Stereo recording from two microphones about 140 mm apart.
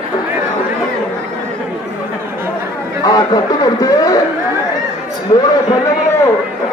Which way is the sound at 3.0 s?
30° left (ahead or behind).